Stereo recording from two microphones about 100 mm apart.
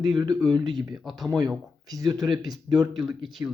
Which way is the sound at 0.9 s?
Centre (ahead or behind).